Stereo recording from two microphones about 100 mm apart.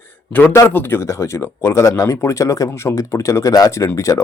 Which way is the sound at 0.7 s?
20° left (ahead or behind).